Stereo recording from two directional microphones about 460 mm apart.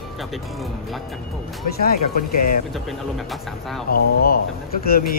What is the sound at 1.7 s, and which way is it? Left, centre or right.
Speech, centre.